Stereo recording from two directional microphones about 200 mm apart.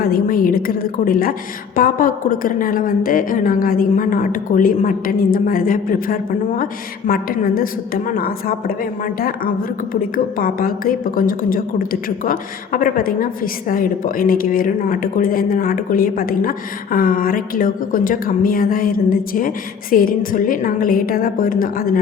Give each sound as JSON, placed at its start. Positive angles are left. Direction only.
{"t": 0.0, "sound": "a woman's voice", "side_deg": 45}